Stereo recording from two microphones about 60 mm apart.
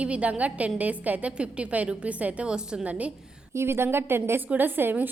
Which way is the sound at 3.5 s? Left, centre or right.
Right.